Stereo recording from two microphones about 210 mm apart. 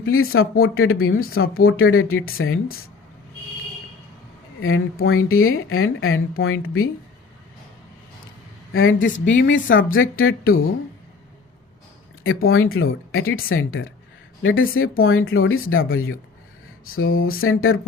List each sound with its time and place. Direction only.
0.0 s speech: 75° left (ahead or behind)
4.6 s speech: 75° left (ahead or behind)
8.7 s a woman's voice: 70° left (ahead or behind)
12.5 s speech: 80° left
17.2 s speech: 80° left